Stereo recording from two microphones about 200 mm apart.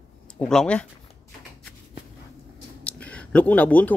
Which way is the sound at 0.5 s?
5° left (ahead or behind).